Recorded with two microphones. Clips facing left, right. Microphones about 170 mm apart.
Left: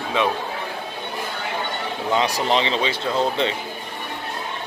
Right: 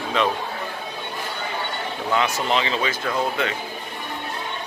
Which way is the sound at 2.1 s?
35° left (ahead or behind).